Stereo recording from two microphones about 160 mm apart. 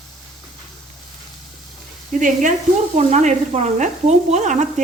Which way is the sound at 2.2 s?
55° right (ahead or behind).